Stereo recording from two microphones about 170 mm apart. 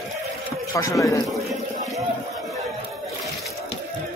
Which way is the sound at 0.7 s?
20° left (ahead or behind).